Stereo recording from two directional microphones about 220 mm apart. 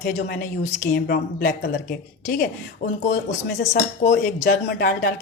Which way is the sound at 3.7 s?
40° left (ahead or behind).